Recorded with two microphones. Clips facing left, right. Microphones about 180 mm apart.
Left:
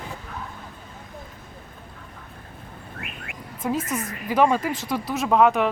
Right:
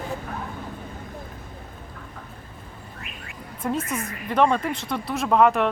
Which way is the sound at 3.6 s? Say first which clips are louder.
Left 1 dB; centre (ahead or behind).